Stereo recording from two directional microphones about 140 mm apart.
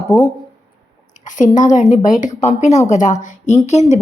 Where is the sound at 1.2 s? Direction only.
65° left (ahead or behind).